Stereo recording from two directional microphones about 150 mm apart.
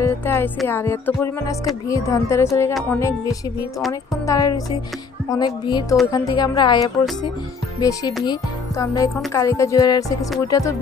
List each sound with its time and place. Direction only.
0.0 s speech: 15° left (ahead or behind)
0.7 s music: 15° left (ahead or behind)
1.9 s speech: 20° left (ahead or behind)